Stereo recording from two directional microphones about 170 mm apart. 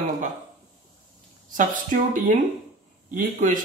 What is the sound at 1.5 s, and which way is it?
Speech, 50° right (ahead or behind).